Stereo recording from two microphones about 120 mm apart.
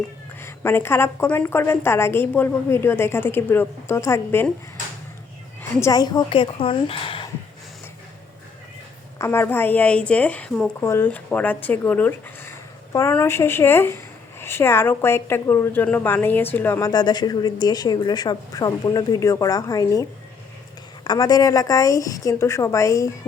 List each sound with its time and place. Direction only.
0.4 s speech: 20° left (ahead or behind)
5.8 s a woman's voice: 30° left (ahead or behind); by 7.3 s 50° left (ahead or behind)
9.1 s speech: 20° left (ahead or behind)
10.8 s speech: 20° left (ahead or behind)
16.9 s speech: 35° left (ahead or behind)